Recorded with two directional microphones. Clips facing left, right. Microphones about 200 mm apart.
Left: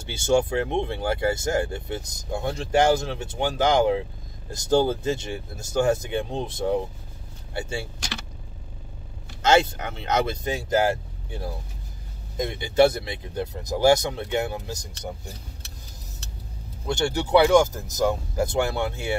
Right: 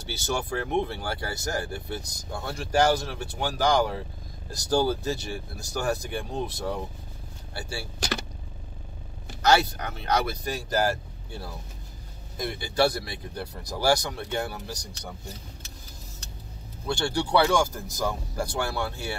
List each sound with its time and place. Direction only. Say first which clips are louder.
0.3 s speech: left 7 dB; 25° left (ahead or behind)
9.4 s speech: left 3 dB; 25° left (ahead or behind)
16.8 s speech: left 2 dB; 20° left (ahead or behind)